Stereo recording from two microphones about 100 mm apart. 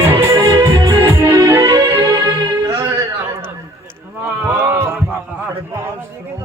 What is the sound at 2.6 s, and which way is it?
Music, 30° right (ahead or behind).